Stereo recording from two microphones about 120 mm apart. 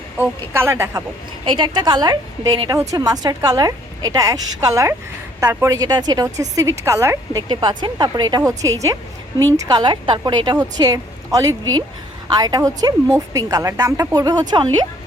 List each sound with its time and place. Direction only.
0.2 s a woman's voice: 20° right (ahead or behind)
1.5 s a woman's voice: 40° right (ahead or behind); by 7.4 s 25° right (ahead or behind)
7.4 s a woman's voice: 40° right (ahead or behind)